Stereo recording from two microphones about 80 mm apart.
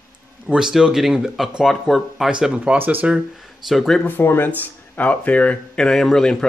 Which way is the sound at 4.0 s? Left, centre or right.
Left.